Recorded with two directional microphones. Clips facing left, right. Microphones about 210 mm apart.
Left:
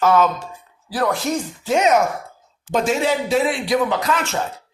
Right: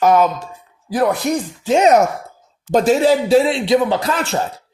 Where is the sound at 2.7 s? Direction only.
35° right (ahead or behind).